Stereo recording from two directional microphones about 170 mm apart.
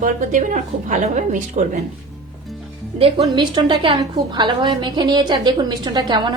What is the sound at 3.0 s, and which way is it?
A woman's voice, 35° right (ahead or behind).